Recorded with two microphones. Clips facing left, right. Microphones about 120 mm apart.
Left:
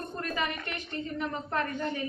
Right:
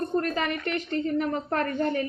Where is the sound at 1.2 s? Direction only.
55° right (ahead or behind).